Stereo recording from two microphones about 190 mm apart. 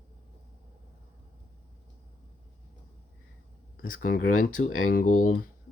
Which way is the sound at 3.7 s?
45° left (ahead or behind).